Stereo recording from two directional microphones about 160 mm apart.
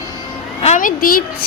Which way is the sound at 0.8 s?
60° left (ahead or behind).